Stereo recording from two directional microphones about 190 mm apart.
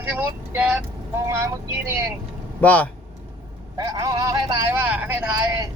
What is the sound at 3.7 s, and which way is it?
Speech, 20° right (ahead or behind).